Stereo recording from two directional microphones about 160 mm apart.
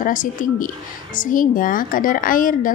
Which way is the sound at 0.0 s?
55° left (ahead or behind).